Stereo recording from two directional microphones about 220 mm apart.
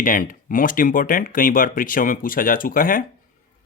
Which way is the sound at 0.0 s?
40° left (ahead or behind).